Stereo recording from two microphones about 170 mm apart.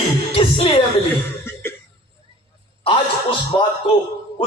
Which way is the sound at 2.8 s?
30° left (ahead or behind).